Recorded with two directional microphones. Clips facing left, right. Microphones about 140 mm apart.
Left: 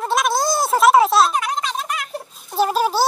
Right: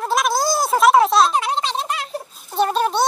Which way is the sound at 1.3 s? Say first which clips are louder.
Right 2 dB; 30° right (ahead or behind).